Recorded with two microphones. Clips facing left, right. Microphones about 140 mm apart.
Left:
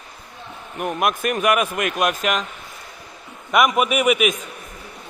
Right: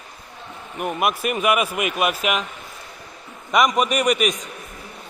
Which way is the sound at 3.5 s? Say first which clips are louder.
Left 1 dB; 5° left (ahead or behind).